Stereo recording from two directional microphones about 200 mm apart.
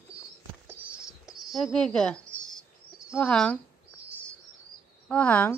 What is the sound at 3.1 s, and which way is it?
Speech, 5° left (ahead or behind).